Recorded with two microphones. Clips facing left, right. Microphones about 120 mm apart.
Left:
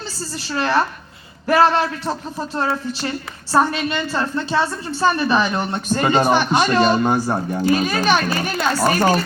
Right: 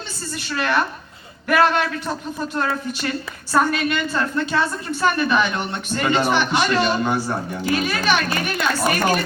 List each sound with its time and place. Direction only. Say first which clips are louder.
0.2 s a woman's voice: left 2 dB; 30° left (ahead or behind)